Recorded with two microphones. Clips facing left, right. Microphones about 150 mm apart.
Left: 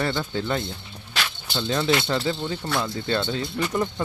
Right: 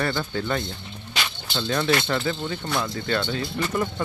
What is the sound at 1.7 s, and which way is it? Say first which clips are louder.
Speech: even; 15° left (ahead or behind).